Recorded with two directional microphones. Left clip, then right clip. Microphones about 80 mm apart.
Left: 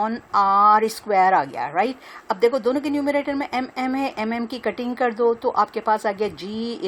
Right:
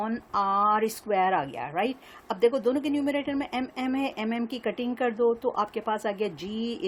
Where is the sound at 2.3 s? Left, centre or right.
Left.